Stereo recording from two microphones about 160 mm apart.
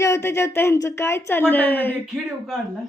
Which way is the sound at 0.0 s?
15° left (ahead or behind).